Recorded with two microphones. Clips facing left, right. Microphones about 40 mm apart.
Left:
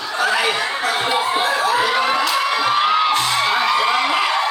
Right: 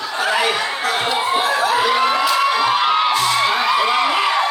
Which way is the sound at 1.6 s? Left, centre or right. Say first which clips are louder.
Right 1 dB; right.